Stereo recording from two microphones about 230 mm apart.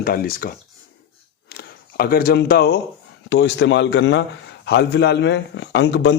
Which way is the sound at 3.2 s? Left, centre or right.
Left.